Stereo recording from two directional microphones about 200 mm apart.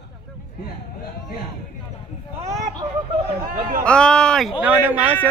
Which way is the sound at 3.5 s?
40° right (ahead or behind).